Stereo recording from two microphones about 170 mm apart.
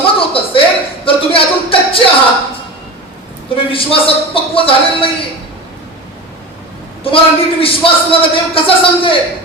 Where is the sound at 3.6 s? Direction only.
30° left (ahead or behind).